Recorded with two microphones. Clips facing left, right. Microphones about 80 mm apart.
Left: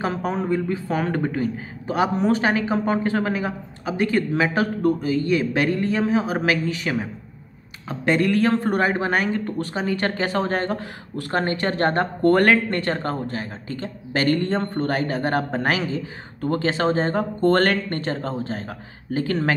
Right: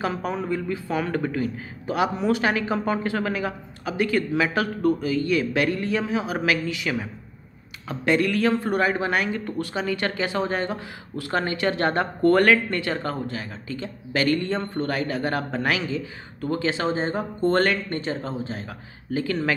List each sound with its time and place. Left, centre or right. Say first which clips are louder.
0.0 s a man's voice: left 2 dB; left